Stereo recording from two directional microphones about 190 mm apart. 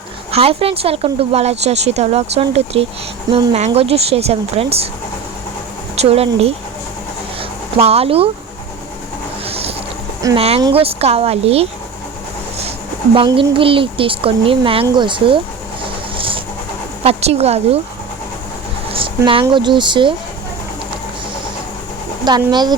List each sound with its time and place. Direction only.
0.3 s speech: 30° right (ahead or behind)
6.0 s speech: 30° right (ahead or behind)
7.8 s speech: 30° right (ahead or behind)
9.5 s a sound: 30° right (ahead or behind)
10.3 s speech: 30° right (ahead or behind)
13.1 s a child's voice: 25° right (ahead or behind)
16.1 s a sound: 30° right (ahead or behind)
17.0 s speech: 35° right (ahead or behind)
18.9 s speech: 30° right (ahead or behind)
22.2 s a child's voice: 20° right (ahead or behind)